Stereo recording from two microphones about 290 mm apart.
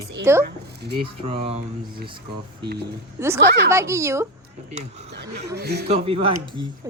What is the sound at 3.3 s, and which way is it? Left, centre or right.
Speech, right.